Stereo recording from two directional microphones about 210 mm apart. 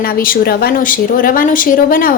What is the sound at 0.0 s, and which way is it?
A woman's voice, 45° left (ahead or behind).